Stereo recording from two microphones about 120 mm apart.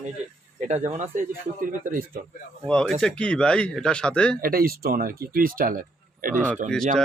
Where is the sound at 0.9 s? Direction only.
90° right.